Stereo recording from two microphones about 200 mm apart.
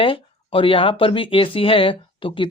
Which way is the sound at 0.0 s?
25° left (ahead or behind).